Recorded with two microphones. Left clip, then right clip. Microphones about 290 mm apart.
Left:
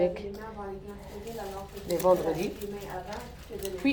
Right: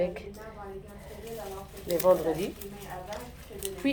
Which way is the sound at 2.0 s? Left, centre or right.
Centre.